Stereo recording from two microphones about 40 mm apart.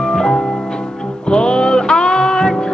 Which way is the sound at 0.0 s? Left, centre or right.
Centre.